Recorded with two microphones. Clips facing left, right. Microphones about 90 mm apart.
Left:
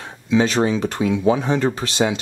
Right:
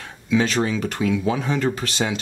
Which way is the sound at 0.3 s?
25° left (ahead or behind).